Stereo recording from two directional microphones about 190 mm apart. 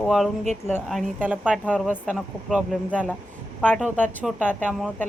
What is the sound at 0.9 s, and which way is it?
Speech, 5° right (ahead or behind).